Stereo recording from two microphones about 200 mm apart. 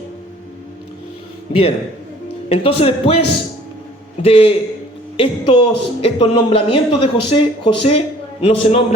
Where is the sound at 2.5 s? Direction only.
30° left (ahead or behind).